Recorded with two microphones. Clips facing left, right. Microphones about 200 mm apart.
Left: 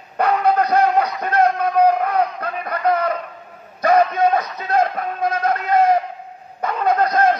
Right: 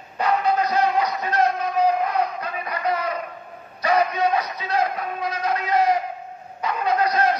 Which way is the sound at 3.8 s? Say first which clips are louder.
Left 5 dB; 50° left (ahead or behind).